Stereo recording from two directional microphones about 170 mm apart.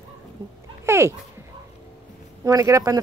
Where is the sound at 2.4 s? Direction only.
20° right (ahead or behind).